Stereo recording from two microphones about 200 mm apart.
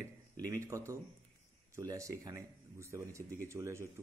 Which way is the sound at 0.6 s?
15° right (ahead or behind).